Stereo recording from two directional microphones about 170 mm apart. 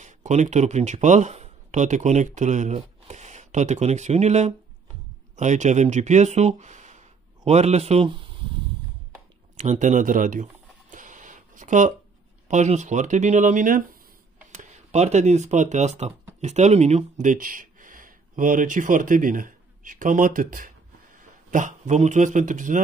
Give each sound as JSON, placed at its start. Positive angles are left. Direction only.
{"t": 0.0, "sound": "speech", "side_deg": -45}
{"t": 9.6, "sound": "a sound", "side_deg": -45}
{"t": 12.4, "sound": "speech", "side_deg": -45}